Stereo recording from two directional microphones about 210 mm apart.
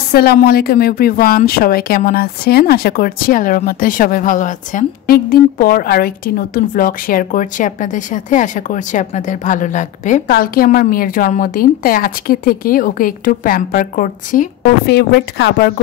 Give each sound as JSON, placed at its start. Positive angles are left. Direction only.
{"t": 0.1, "sound": "a woman's voice", "side_deg": 45}
{"t": 14.9, "sound": "a woman's voice", "side_deg": 50}